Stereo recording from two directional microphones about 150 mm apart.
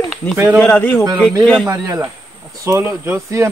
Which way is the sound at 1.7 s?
20° right (ahead or behind).